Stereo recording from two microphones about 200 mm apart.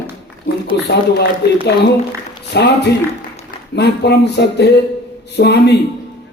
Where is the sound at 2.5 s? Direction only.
55° left (ahead or behind).